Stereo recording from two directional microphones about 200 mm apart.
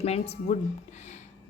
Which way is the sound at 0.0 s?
30° left (ahead or behind).